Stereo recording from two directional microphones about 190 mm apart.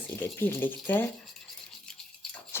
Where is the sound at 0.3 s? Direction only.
10° left (ahead or behind).